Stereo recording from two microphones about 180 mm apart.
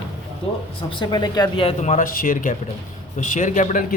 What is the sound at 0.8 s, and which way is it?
A man's voice, 25° left (ahead or behind).